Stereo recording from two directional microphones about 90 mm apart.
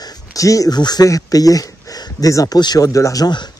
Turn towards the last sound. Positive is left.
turn(degrees=40)  # may be behind; listen again after turning